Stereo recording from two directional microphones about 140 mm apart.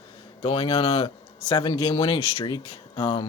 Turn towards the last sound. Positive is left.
turn(degrees=35)  # may be behind; listen again after turning